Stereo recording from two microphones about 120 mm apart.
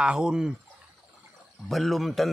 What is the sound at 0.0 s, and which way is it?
Speech, 5° right (ahead or behind).